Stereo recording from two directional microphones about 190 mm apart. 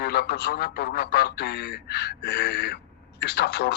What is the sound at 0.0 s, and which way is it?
Speech, 55° left (ahead or behind).